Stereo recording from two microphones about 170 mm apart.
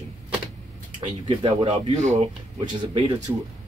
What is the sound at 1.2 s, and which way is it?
Speech, 30° right (ahead or behind).